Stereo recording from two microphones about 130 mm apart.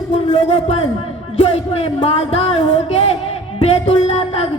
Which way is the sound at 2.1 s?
50° left (ahead or behind).